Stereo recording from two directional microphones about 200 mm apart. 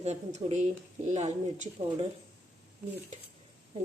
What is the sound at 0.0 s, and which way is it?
Speech, 35° right (ahead or behind).